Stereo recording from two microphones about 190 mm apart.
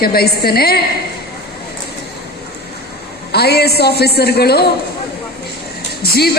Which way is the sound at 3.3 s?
60° left (ahead or behind).